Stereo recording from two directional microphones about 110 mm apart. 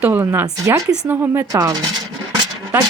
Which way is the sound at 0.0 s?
15° right (ahead or behind).